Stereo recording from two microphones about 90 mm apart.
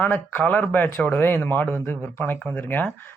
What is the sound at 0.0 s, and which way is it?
Speech, 15° left (ahead or behind).